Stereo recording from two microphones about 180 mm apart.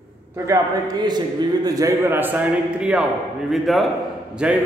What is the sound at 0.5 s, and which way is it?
A man's voice, 20° right (ahead or behind).